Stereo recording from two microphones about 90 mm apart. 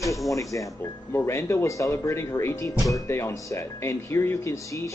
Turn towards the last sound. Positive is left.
turn(degrees=35)  # may be behind; listen again after turning